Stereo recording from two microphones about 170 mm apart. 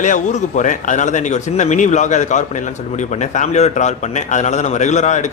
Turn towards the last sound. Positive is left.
turn(degrees=45)  # may be behind; listen again after turning